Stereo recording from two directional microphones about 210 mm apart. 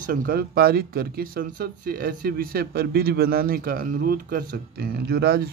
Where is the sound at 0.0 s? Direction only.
45° right (ahead or behind).